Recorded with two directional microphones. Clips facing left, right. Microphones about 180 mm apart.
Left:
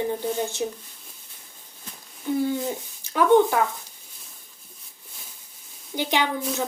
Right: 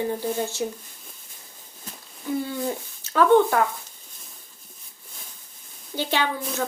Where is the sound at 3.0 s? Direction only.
15° left (ahead or behind).